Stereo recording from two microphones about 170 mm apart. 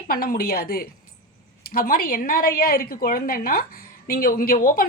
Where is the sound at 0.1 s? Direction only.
60° left (ahead or behind).